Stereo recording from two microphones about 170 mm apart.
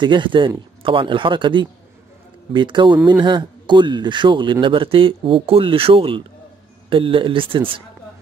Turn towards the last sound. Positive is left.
turn(degrees=-30)  # may be behind; listen again after turning